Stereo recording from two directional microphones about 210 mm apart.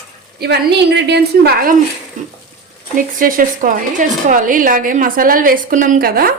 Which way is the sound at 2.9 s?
40° right (ahead or behind).